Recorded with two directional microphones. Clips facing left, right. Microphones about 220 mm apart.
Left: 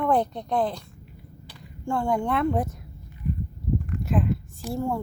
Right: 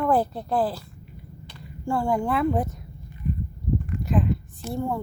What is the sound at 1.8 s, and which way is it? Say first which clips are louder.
Speech: right 1 dB; 5° right (ahead or behind).